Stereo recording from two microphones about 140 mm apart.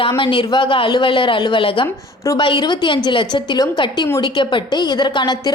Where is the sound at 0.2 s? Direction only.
35° left (ahead or behind).